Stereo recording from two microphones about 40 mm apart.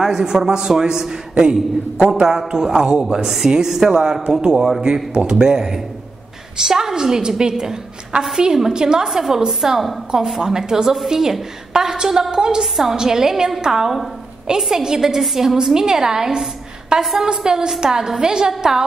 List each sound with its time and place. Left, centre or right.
0.0 s a woman's voice: centre
3.3 s a woman's voice: centre
8.7 s a woman's voice: centre